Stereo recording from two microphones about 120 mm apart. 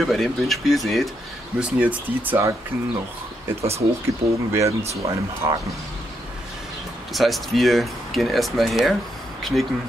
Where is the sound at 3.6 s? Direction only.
60° right (ahead or behind).